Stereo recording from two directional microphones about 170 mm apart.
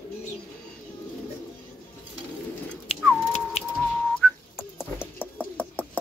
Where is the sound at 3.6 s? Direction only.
40° left (ahead or behind).